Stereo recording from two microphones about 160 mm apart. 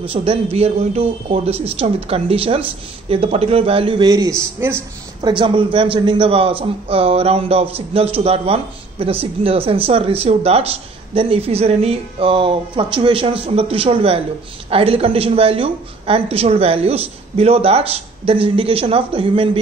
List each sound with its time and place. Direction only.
0.1 s speech: 35° right (ahead or behind); by 4.8 s 15° right (ahead or behind)
5.2 s speech: 30° right (ahead or behind)